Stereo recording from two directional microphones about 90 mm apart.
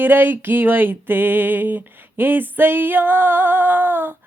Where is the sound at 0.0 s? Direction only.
20° right (ahead or behind).